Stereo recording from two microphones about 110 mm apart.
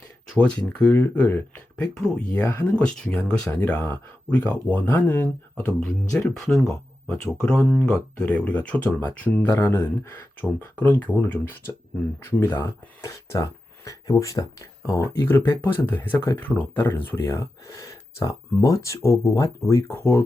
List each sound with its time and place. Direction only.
0.3 s speech: 10° left (ahead or behind)